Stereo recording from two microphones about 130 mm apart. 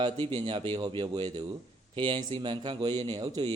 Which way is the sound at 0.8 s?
35° right (ahead or behind).